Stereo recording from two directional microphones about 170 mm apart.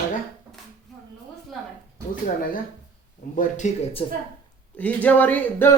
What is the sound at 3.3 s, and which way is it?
Speech, 45° left (ahead or behind).